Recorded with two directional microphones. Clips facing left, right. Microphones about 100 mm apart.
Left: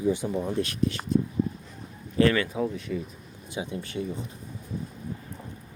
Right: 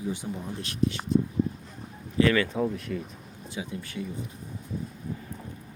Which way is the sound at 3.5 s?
25° left (ahead or behind).